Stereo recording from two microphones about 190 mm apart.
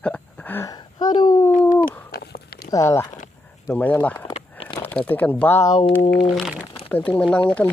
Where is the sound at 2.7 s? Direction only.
15° left (ahead or behind).